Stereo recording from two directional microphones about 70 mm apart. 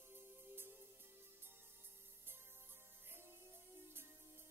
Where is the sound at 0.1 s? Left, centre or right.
Right.